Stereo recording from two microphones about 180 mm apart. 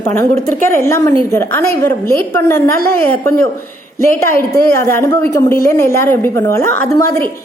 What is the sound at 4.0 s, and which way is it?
A woman's voice, 15° left (ahead or behind).